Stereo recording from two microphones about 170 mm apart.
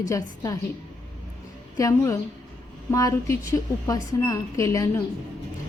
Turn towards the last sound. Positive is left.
turn(degrees=20)  # may be behind; listen again after turning